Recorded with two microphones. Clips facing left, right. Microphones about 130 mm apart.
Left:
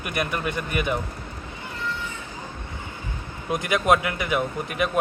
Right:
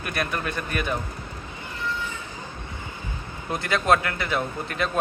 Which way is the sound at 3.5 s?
15° left (ahead or behind).